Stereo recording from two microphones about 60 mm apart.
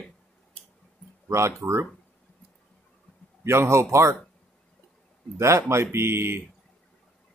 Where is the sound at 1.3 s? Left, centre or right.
Right.